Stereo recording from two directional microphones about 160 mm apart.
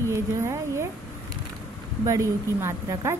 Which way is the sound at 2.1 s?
20° right (ahead or behind).